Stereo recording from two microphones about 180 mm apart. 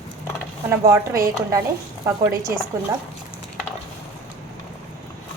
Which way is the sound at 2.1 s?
15° right (ahead or behind).